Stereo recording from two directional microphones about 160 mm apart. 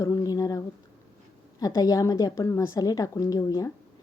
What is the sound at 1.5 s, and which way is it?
A woman's voice, 25° left (ahead or behind).